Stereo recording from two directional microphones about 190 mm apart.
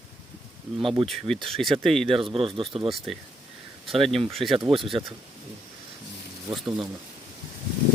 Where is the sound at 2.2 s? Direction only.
30° right (ahead or behind).